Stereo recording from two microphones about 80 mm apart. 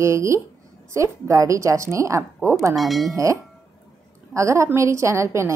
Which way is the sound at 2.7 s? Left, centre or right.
Centre.